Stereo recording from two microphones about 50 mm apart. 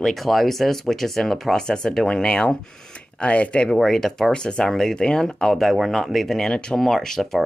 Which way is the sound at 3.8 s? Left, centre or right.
Centre.